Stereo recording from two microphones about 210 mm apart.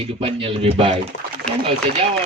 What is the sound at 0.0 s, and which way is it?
Speech, 25° right (ahead or behind).